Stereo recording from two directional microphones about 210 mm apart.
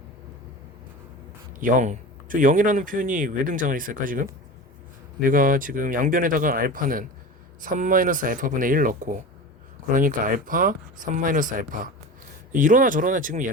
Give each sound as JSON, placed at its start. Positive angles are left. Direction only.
{"t": 1.5, "sound": "speech", "side_deg": -40}